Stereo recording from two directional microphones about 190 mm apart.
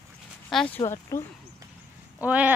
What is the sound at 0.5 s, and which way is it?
Speech, centre (ahead or behind).